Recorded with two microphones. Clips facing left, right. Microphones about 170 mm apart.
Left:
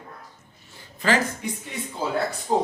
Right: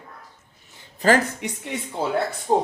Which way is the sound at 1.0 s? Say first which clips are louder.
Right 5 dB; 35° right (ahead or behind).